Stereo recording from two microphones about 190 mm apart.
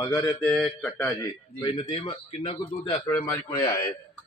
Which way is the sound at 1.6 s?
25° left (ahead or behind).